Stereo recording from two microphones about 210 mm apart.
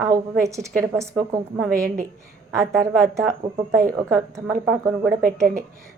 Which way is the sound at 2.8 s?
15° right (ahead or behind).